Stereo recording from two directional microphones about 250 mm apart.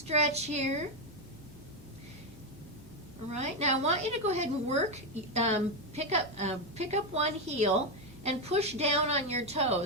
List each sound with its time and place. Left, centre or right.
0.3 s a woman's voice: right
3.3 s a woman's voice: right